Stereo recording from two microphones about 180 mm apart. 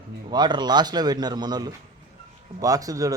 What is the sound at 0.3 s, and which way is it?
Speech, 25° right (ahead or behind).